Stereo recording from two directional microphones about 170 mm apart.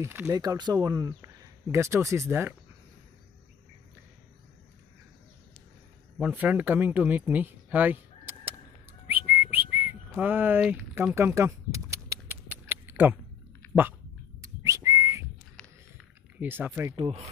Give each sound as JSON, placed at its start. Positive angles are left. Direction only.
{"t": 0.0, "sound": "speech", "side_deg": -10}
{"t": 0.3, "sound": "speech", "side_deg": -20}
{"t": 6.1, "sound": "speech", "side_deg": -10}
{"t": 9.0, "sound": "whistling", "side_deg": -10}
{"t": 14.4, "sound": "whistling", "side_deg": -20}
{"t": 16.3, "sound": "speech", "side_deg": -10}
{"t": 16.9, "sound": "speech", "side_deg": -35}